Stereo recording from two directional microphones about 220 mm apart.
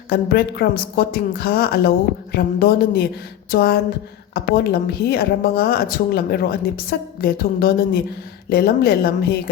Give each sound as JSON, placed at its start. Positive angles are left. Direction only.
{"t": 0.1, "sound": "a woman's voice", "side_deg": 45}